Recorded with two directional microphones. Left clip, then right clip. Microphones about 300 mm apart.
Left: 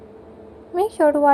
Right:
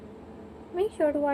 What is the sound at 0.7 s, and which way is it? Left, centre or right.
Speech, left.